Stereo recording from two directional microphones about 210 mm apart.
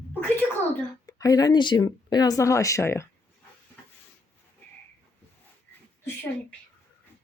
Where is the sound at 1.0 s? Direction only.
15° left (ahead or behind).